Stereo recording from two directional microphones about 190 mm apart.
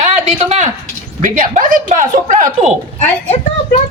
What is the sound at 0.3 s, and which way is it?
A man's voice, 35° right (ahead or behind).